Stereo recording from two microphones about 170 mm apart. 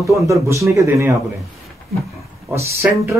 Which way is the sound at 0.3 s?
20° right (ahead or behind).